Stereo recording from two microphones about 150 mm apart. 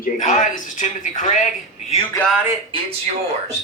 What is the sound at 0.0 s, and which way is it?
A woman's voice, 55° left (ahead or behind).